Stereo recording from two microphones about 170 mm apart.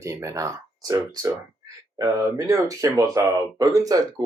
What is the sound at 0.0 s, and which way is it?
Speech, 15° right (ahead or behind).